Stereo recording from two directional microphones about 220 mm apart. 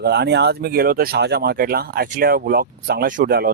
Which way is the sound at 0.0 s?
50° right (ahead or behind).